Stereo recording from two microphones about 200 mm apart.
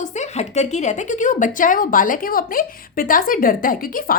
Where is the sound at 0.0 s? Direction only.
35° left (ahead or behind).